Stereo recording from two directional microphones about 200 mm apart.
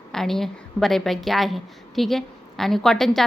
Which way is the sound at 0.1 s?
Centre (ahead or behind).